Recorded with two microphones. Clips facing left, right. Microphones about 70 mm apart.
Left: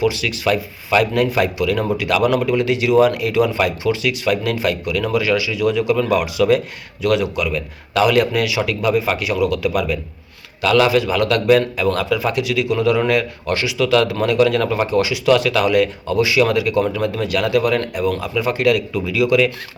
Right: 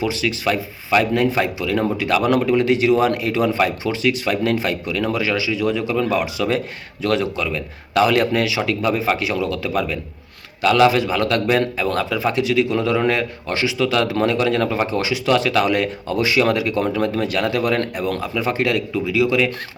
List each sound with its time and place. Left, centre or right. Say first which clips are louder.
0.0 s a man's voice: left 2 dB; right